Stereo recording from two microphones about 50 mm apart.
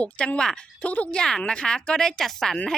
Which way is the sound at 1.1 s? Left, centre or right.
Centre.